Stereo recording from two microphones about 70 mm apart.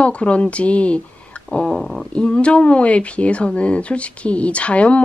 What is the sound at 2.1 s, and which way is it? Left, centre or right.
A woman's voice, centre.